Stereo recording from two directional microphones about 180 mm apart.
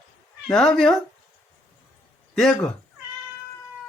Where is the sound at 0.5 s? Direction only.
5° left (ahead or behind).